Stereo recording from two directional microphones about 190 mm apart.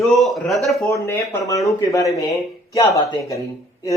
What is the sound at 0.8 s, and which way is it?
A man's voice, 15° left (ahead or behind).